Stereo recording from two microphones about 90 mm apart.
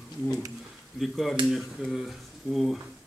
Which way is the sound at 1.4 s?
65° right (ahead or behind).